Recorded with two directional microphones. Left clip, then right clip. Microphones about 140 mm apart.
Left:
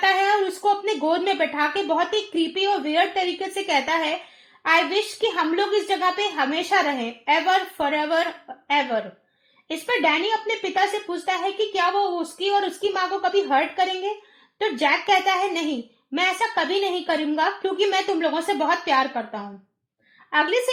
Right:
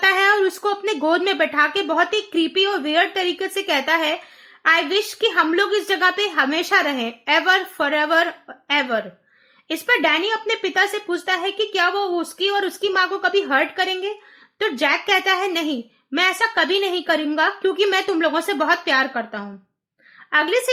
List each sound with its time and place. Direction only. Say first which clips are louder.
0.0 s speech: right 3 dB; 25° right (ahead or behind)